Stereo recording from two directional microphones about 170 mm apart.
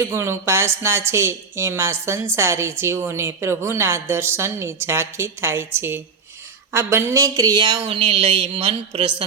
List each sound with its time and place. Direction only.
0.0 s speech: 15° right (ahead or behind); by 9.2 s 30° right (ahead or behind)